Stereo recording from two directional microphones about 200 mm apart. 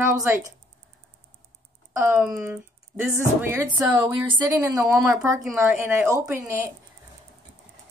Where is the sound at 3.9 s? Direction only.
20° right (ahead or behind).